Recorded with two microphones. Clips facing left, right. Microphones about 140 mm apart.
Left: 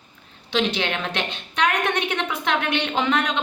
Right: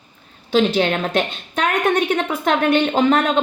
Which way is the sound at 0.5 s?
40° right (ahead or behind).